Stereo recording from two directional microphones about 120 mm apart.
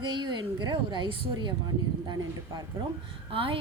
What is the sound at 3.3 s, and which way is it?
Speech, 50° right (ahead or behind).